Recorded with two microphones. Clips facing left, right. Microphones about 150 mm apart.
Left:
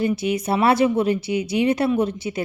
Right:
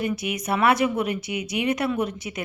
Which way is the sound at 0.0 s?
30° left (ahead or behind).